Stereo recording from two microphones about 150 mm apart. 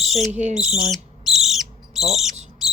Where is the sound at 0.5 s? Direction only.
5° right (ahead or behind).